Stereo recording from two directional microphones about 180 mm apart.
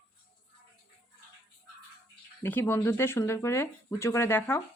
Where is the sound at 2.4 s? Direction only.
10° left (ahead or behind).